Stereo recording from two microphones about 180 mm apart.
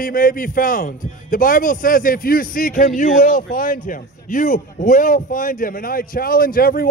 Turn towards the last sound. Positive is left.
turn(degrees=55)  # may be behind; listen again after turning